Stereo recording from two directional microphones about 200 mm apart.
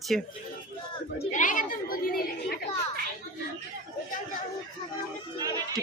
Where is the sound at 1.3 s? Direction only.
40° left (ahead or behind).